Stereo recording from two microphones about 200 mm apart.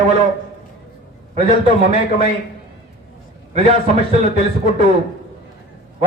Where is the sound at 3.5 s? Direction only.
30° right (ahead or behind).